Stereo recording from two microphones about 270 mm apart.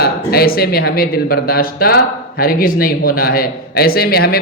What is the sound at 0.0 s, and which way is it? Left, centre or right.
Speech, left.